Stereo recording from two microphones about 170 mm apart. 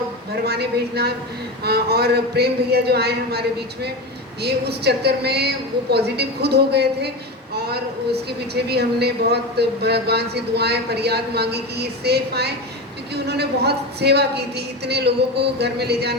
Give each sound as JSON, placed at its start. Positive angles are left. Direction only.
{"t": 0.4, "sound": "a man's voice", "side_deg": -70}
{"t": 4.4, "sound": "a man's voice", "side_deg": -70}
{"t": 8.6, "sound": "a man's voice", "side_deg": -75}